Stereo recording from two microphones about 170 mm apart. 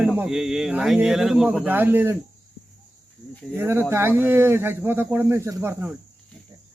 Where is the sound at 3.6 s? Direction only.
15° right (ahead or behind).